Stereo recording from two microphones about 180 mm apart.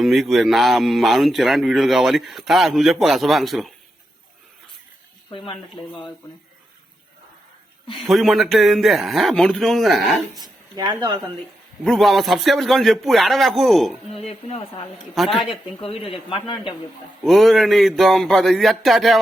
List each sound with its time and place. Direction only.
0.0 s speech: centre (ahead or behind)
5.3 s speech: 30° left (ahead or behind)
8.0 s speech: centre (ahead or behind)
10.4 s speech: 25° right (ahead or behind)
11.8 s speech: centre (ahead or behind)
14.1 s a woman's voice: 35° left (ahead or behind)
15.1 s speech: centre (ahead or behind)
15.4 s a woman's voice: 30° left (ahead or behind)
17.2 s speech: centre (ahead or behind)